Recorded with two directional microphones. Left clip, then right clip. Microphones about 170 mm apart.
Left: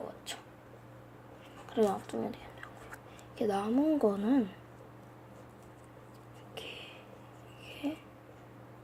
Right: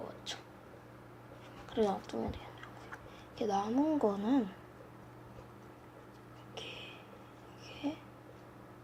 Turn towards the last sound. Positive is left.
turn(degrees=15)  # may be behind; listen again after turning